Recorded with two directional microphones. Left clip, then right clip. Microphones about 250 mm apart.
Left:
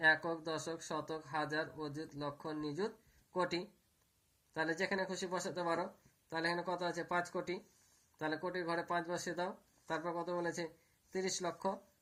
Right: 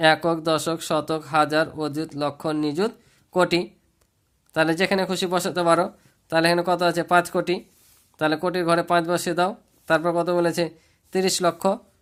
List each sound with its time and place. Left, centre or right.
0.0 s speech: right
4.5 s speech: right